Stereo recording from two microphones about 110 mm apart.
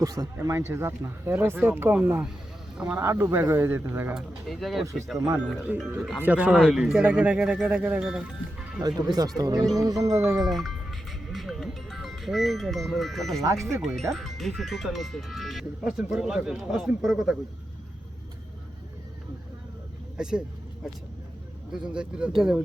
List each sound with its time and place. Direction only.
0.0 s speech: 35° right (ahead or behind); by 3.0 s 10° right (ahead or behind)
3.0 s speech: 25° right (ahead or behind)
4.1 s speech: centre (ahead or behind)
8.8 s speech: 40° right (ahead or behind)
11.3 s music: centre (ahead or behind)
14.1 s speech: centre (ahead or behind)
20.2 s speech: 5° right (ahead or behind)
21.7 s speech: 10° right (ahead or behind)